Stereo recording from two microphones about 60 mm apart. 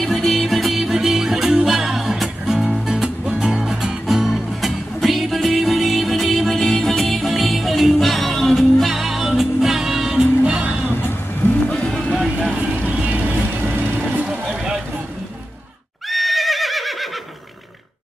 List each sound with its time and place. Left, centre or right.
0.0 s music: centre
10.9 s music: left
11.7 s music: centre
12.2 s vehicle: centre
12.5 s vehicle: right
13.9 s music: right
14.3 s a sound: centre
16.1 s neigh: centre